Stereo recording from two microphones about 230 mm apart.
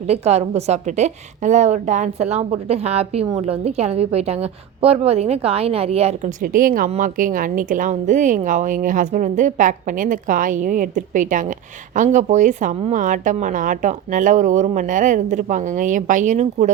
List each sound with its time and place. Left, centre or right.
0.1 s a woman's voice: right